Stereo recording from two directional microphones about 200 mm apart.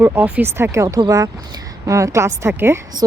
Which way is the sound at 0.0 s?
10° right (ahead or behind).